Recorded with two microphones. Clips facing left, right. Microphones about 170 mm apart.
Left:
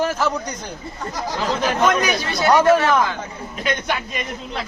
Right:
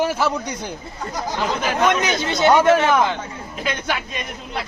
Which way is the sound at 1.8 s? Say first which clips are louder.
Right 1 dB; 20° right (ahead or behind).